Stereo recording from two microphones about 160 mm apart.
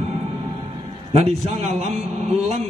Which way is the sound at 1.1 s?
40° right (ahead or behind).